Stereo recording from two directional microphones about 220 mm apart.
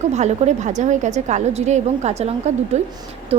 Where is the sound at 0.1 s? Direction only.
30° right (ahead or behind).